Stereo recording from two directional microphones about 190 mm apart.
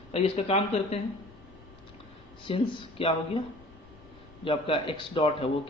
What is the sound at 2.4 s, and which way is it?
Speech, 30° left (ahead or behind).